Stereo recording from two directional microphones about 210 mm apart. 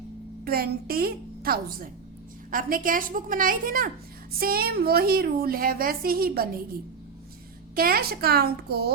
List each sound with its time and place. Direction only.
0.4 s a woman's voice: 45° right (ahead or behind)
7.8 s a woman's voice: 45° right (ahead or behind)